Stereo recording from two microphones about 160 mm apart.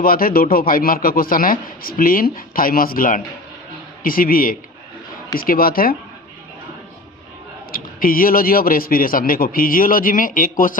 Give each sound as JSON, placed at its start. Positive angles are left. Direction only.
{"t": 0.0, "sound": "a man's voice", "side_deg": 65}
{"t": 7.7, "sound": "a man's voice", "side_deg": 60}